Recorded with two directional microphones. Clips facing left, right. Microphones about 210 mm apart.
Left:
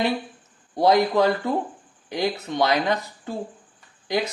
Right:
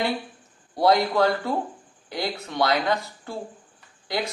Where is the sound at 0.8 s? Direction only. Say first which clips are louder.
Left 2 dB; 20° left (ahead or behind).